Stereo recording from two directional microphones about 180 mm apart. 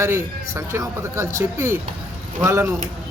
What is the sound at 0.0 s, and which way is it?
Speech, 15° right (ahead or behind).